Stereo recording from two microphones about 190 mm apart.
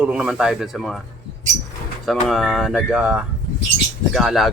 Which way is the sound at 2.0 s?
Centre (ahead or behind).